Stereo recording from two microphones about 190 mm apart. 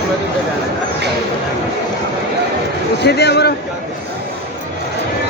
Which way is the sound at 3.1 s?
60° left (ahead or behind).